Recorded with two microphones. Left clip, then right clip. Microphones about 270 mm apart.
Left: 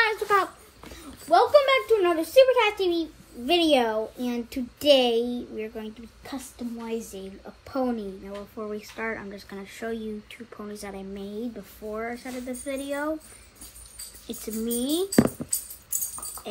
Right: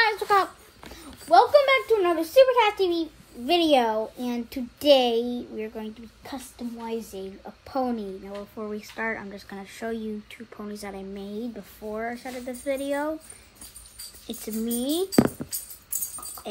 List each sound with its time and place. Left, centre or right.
0.0 s a child's voice: right
14.2 s a child's voice: right